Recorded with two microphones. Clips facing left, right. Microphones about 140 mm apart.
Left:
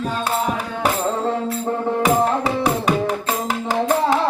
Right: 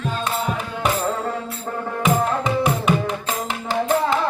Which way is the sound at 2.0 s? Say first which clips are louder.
Left 1 dB; 35° left (ahead or behind).